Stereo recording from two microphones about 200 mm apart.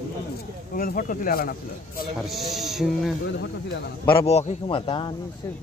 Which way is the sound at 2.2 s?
Centre (ahead or behind).